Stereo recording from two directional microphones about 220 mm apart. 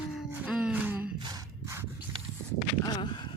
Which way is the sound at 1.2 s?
15° right (ahead or behind).